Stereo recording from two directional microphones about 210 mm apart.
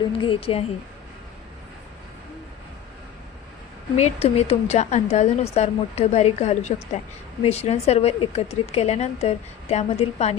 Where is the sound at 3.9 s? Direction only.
30° left (ahead or behind).